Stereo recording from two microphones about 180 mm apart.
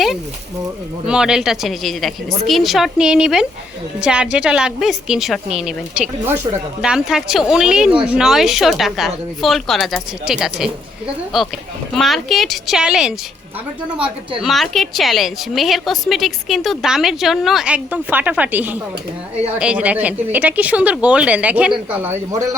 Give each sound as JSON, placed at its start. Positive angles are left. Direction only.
{"t": 1.0, "sound": "a woman's voice", "side_deg": -5}
{"t": 11.9, "sound": "a woman's voice", "side_deg": 0}
{"t": 14.4, "sound": "a woman's voice", "side_deg": 0}